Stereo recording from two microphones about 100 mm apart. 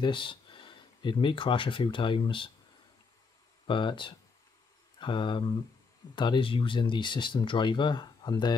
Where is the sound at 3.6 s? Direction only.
55° left (ahead or behind).